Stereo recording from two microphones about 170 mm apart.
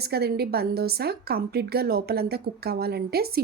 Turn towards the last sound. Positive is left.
turn(degrees=-65)  # may be behind; listen again after turning